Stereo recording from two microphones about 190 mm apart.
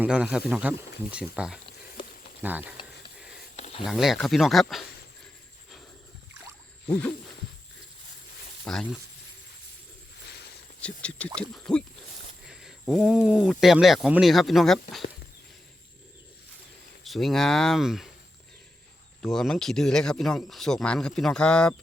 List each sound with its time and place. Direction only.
0.0 s speech: 5° right (ahead or behind)
3.5 s a sound: 30° left (ahead or behind)
3.8 s speech: centre (ahead or behind)
6.8 s a sound: 5° left (ahead or behind)
8.6 s speech: centre (ahead or behind)
11.3 s speech: 5° left (ahead or behind)
17.0 s speech: centre (ahead or behind)
19.2 s speech: centre (ahead or behind)